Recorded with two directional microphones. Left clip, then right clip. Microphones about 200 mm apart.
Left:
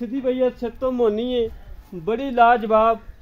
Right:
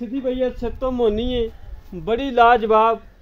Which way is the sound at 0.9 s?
15° right (ahead or behind).